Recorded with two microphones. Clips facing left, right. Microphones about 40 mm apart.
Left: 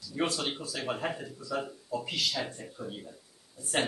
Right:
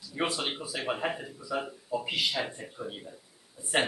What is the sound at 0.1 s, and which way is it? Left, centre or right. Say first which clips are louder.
A man's voice: even; centre.